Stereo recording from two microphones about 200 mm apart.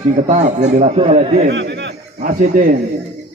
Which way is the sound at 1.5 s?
60° right (ahead or behind).